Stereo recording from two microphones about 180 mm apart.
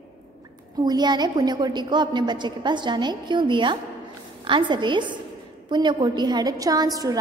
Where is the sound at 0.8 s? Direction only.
25° right (ahead or behind).